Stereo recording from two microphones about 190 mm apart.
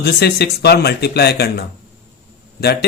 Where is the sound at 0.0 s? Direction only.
60° left (ahead or behind).